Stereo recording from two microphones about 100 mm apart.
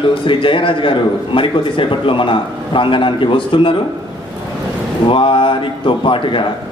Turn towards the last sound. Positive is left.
turn(degrees=55)  # may be behind; listen again after turning